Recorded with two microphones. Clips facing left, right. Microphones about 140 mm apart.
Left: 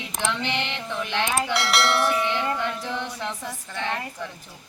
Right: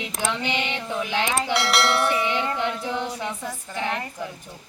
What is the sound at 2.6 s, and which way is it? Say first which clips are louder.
Speech: right 2 dB; 15° right (ahead or behind).